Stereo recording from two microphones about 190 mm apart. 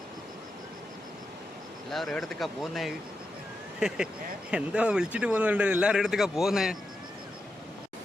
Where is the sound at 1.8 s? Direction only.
Centre (ahead or behind).